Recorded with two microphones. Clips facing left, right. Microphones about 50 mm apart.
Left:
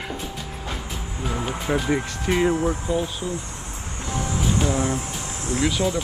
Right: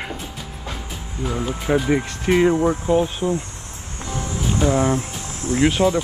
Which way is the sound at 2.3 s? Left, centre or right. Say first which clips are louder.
Right 5 dB; right.